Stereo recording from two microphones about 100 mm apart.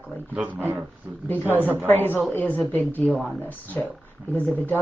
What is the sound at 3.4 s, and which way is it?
Speech, 15° left (ahead or behind).